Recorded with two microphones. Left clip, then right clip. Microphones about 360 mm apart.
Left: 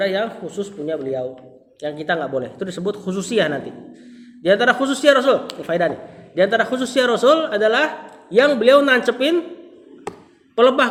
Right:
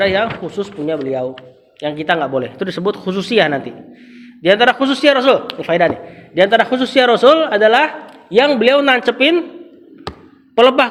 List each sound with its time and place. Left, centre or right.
0.0 s a man's voice: right
10.5 s a man's voice: centre